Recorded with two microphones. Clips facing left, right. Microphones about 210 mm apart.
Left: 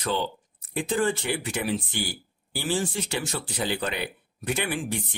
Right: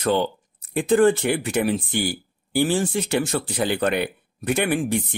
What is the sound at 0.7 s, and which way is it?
Speech, 50° right (ahead or behind).